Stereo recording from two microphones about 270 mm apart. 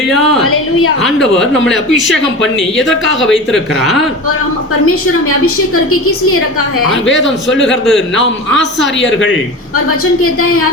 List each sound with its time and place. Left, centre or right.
0.1 s a sound: centre
0.4 s a sound: left
1.0 s speech: centre
3.5 s speech: centre
5.9 s a man's voice: left
7.3 s a man's voice: left
9.0 s a man's voice: left